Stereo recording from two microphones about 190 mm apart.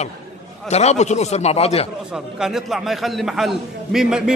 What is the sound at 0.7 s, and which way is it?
Speech, 35° left (ahead or behind).